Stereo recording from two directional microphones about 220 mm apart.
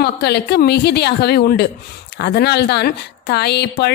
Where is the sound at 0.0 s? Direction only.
50° left (ahead or behind).